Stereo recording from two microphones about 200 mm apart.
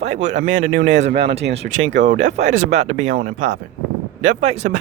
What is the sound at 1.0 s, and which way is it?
Speech, 55° right (ahead or behind).